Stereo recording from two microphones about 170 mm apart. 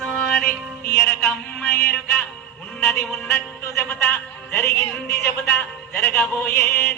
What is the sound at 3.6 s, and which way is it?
A man's voice, 15° left (ahead or behind).